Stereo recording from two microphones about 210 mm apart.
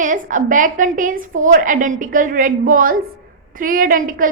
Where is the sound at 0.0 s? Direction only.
40° right (ahead or behind).